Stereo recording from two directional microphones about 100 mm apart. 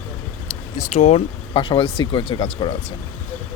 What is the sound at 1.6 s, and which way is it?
Speech, 50° left (ahead or behind).